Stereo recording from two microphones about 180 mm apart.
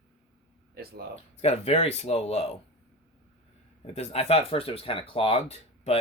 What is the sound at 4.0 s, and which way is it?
Speech, 35° left (ahead or behind).